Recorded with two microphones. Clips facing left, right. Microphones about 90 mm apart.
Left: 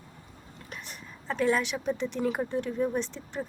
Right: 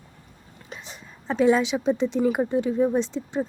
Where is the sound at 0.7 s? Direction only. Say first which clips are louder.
Right 3 dB; 20° right (ahead or behind).